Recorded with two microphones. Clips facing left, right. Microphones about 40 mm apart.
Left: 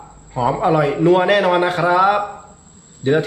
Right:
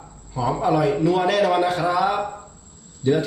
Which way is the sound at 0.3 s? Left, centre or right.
Left.